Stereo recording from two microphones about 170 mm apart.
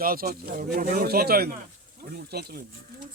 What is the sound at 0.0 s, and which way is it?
Speech, 60° right (ahead or behind).